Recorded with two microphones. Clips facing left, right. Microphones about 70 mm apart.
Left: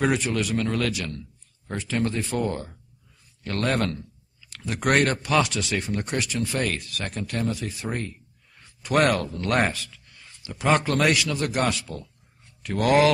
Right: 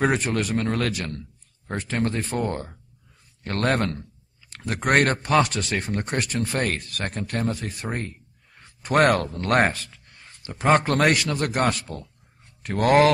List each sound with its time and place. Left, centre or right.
0.0 s speech: right
3.4 s a sound: right
4.9 s speech: right